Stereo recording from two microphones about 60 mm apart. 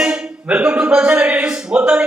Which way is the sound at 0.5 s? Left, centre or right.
Right.